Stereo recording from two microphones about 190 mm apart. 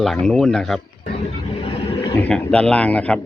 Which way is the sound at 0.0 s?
Centre (ahead or behind).